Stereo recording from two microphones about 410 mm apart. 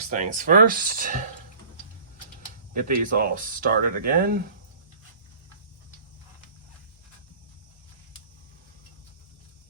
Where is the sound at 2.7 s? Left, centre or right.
Centre.